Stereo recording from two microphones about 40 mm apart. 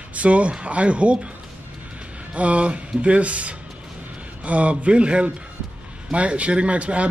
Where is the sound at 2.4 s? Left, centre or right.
Right.